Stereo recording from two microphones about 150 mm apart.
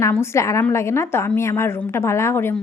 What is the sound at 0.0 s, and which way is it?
A woman's voice, 20° left (ahead or behind).